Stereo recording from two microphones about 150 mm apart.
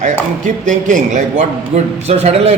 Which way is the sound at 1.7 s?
45° right (ahead or behind).